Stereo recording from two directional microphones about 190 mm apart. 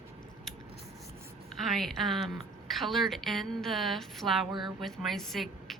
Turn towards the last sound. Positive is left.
turn(degrees=0)  # may be behind; listen again after turning